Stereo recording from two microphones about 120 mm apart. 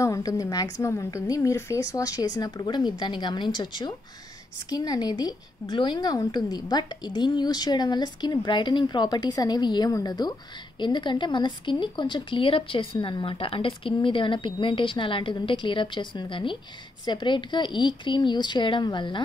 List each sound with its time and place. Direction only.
0.0 s a woman's voice: 30° left (ahead or behind)